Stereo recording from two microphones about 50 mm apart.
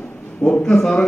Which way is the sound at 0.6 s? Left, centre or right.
Centre.